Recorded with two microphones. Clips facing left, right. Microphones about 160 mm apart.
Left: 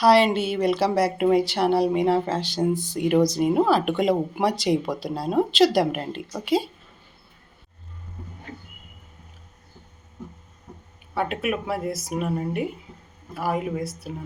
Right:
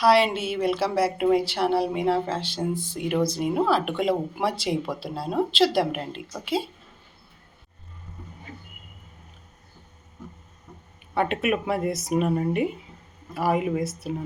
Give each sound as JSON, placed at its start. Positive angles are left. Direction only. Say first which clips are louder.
{"t": 0.0, "sound": "speech", "louder": "left 2 dB", "side_deg": 0}
{"t": 11.1, "sound": "speech", "louder": "right 2 dB", "side_deg": 0}